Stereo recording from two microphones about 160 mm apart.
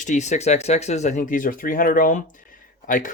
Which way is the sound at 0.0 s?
50° left (ahead or behind).